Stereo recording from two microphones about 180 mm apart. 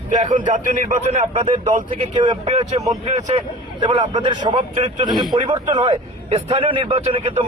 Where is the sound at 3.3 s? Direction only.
25° right (ahead or behind).